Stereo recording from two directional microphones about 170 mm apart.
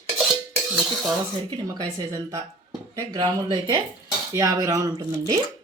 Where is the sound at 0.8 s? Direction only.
Centre (ahead or behind).